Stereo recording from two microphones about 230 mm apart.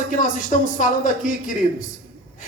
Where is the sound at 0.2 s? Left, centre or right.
Left.